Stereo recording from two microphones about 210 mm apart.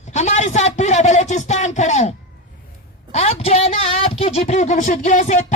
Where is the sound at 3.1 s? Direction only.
30° left (ahead or behind).